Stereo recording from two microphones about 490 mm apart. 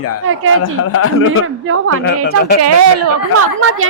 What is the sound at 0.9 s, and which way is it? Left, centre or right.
Speech, left.